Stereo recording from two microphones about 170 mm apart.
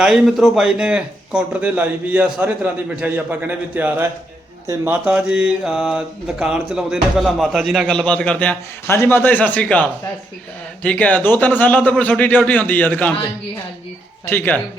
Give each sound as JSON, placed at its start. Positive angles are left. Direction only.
{"t": 0.0, "sound": "mantra", "side_deg": -5}
{"t": 2.9, "sound": "a man's voice", "side_deg": -10}
{"t": 4.6, "sound": "mantra", "side_deg": -10}
{"t": 10.8, "sound": "a man's voice", "side_deg": 10}
{"t": 14.3, "sound": "a man's voice", "side_deg": 10}